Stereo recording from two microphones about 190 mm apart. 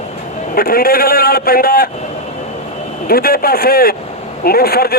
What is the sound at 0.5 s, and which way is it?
A man's voice, 50° left (ahead or behind).